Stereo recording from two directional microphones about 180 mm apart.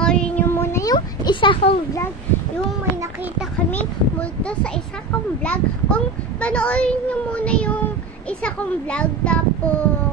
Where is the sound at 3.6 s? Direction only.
10° left (ahead or behind).